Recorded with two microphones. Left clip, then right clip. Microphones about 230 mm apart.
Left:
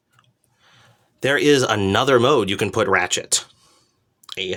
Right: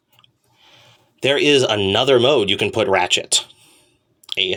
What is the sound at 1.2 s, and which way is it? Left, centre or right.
Speech, centre.